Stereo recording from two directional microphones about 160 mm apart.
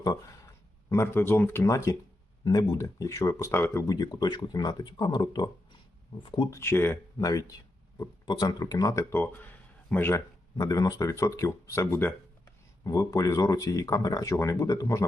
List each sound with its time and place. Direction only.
0.0 s speech: 20° left (ahead or behind)
6.5 s speech: 15° left (ahead or behind)